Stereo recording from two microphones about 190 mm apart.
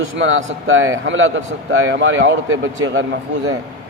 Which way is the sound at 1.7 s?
75° right (ahead or behind).